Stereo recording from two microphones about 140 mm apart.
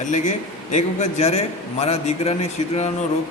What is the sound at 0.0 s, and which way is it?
A man's voice, 60° left (ahead or behind).